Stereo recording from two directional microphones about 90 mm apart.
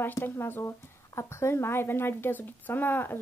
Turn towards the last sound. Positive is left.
turn(degrees=20)  # may be behind; listen again after turning